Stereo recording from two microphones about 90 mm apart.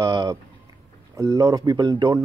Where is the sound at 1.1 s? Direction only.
35° right (ahead or behind).